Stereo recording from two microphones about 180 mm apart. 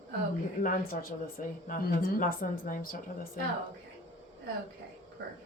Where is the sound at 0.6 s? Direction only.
55° left (ahead or behind).